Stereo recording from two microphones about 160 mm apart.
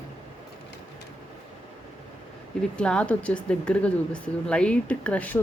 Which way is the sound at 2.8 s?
5° left (ahead or behind).